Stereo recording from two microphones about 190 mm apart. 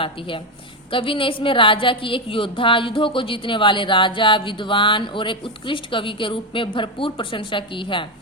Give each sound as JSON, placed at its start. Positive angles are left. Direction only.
{"t": 0.0, "sound": "a woman's voice", "side_deg": 25}